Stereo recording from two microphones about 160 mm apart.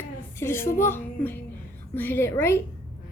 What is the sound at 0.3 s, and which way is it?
A woman's voice, 15° left (ahead or behind).